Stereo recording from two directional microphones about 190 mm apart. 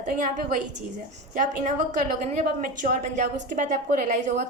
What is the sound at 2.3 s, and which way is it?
A woman's voice, 45° right (ahead or behind).